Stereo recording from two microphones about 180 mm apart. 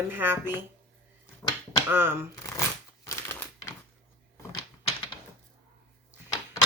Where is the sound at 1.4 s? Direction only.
15° left (ahead or behind).